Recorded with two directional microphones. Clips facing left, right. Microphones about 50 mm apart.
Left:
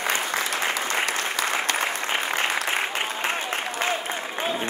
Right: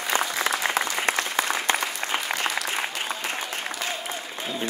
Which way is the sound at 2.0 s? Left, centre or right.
Left.